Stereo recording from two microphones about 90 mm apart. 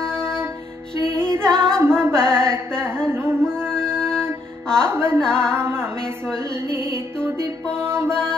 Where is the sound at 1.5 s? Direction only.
30° right (ahead or behind).